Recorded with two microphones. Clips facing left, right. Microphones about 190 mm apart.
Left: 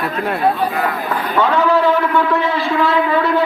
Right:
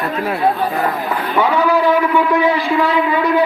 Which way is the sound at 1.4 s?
10° right (ahead or behind).